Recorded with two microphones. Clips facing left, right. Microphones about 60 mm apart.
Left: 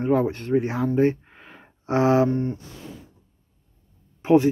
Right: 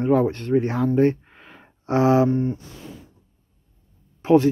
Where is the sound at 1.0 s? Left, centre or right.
Left.